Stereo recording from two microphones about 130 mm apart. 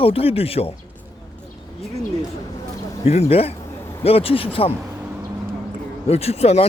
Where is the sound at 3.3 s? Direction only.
50° left (ahead or behind).